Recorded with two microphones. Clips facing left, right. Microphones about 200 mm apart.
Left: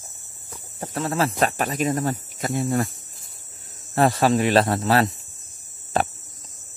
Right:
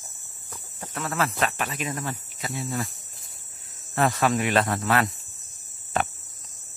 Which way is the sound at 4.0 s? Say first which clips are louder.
Left 4 dB; 35° left (ahead or behind).